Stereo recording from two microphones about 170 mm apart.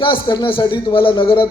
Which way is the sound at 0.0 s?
30° left (ahead or behind).